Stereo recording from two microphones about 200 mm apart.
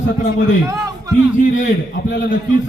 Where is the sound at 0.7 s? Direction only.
20° right (ahead or behind).